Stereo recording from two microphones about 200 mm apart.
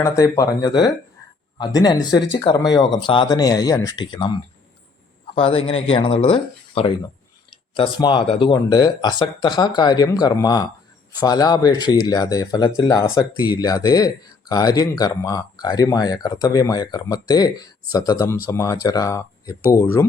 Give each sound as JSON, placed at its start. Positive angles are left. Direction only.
{"t": 0.0, "sound": "speech", "side_deg": 15}